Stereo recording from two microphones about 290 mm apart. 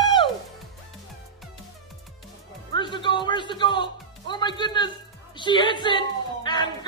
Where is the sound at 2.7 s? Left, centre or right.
Centre.